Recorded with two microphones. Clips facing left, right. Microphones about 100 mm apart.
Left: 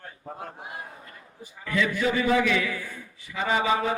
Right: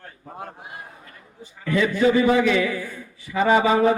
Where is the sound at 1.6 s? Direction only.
30° right (ahead or behind).